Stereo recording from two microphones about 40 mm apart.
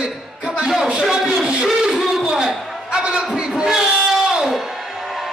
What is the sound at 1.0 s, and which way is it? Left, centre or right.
A man's voice, centre.